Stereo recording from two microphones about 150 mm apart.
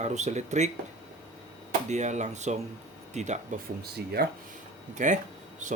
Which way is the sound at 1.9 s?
50° right (ahead or behind).